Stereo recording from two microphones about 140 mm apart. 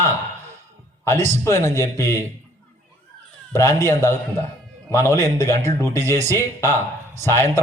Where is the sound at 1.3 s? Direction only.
20° left (ahead or behind).